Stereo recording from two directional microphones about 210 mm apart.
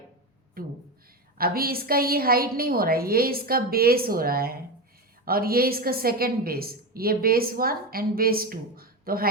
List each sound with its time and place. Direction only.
0.6 s a woman's voice: 45° right (ahead or behind)